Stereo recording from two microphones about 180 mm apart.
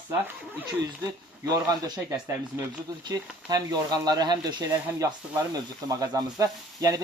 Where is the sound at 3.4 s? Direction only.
20° right (ahead or behind).